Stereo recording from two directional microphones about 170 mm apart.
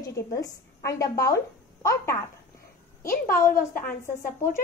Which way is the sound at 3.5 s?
55° left (ahead or behind).